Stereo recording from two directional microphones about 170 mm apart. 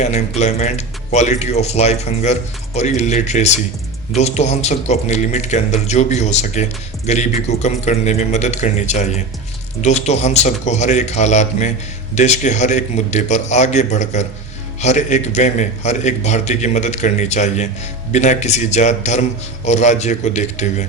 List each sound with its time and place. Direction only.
0.0 s a man's voice: 40° left (ahead or behind)